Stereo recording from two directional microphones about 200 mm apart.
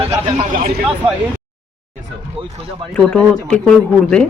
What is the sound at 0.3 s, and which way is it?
Speech, 30° right (ahead or behind).